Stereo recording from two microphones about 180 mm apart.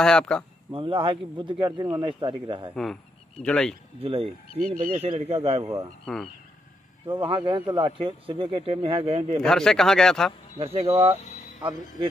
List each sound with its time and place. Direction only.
0.0 s speech: 5° left (ahead or behind)
0.7 s speech: 30° right (ahead or behind)
2.7 s speech: centre (ahead or behind)
4.0 s speech: 30° right (ahead or behind)
4.6 s speech: 50° right (ahead or behind)
5.0 s speech: 35° right (ahead or behind)
5.6 s speech: 20° right (ahead or behind)
6.1 s speech: centre (ahead or behind)
7.1 s speech: 25° right (ahead or behind)
9.4 s speech: 5° left (ahead or behind)
10.6 s speech: 35° right (ahead or behind)
11.2 s a sound: 40° left (ahead or behind)